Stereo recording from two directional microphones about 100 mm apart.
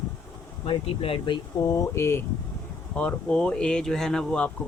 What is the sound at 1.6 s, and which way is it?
Speech, 30° left (ahead or behind).